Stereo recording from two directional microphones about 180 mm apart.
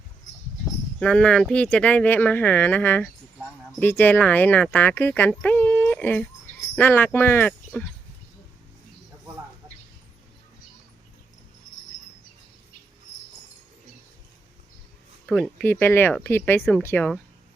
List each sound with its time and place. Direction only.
0.9 s speech: 5° left (ahead or behind)
9.6 s a sound: 20° right (ahead or behind)
15.3 s speech: 5° left (ahead or behind)